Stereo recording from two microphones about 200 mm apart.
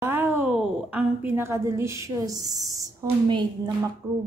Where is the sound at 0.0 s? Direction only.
10° right (ahead or behind).